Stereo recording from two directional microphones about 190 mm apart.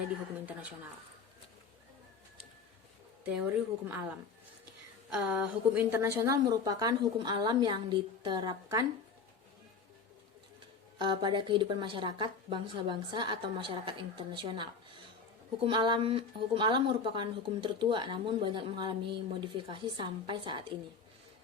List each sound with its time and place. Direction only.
3.2 s a woman's voice: 5° right (ahead or behind); by 8.8 s 20° right (ahead or behind)
10.9 s speech: 25° right (ahead or behind)